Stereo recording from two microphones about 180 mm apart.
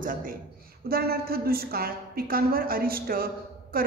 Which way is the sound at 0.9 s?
60° right (ahead or behind).